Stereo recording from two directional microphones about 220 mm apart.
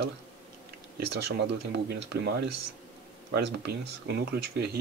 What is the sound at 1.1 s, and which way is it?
Speech, 50° right (ahead or behind).